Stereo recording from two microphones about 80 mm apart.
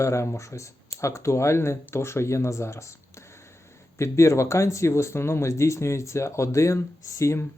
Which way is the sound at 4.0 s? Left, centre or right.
Left.